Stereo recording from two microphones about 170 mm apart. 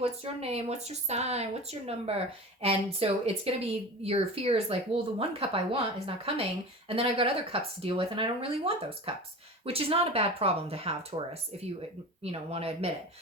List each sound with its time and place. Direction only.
0.0 s a woman's voice: 35° right (ahead or behind)